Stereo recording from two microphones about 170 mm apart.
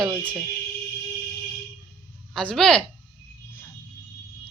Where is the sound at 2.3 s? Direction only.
5° left (ahead or behind).